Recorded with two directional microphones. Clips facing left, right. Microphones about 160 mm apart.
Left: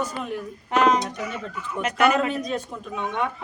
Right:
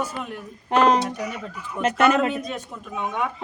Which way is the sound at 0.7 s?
30° right (ahead or behind).